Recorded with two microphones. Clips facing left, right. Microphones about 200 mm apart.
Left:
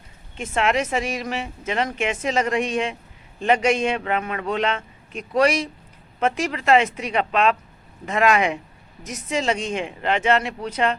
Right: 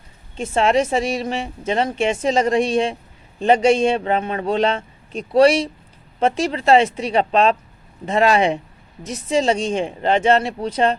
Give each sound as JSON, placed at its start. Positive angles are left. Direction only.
{"t": 0.3, "sound": "speech", "side_deg": -30}